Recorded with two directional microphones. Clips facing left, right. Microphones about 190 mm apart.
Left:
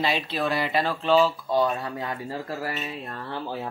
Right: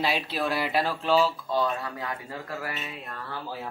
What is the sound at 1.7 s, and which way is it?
Speech, 25° left (ahead or behind).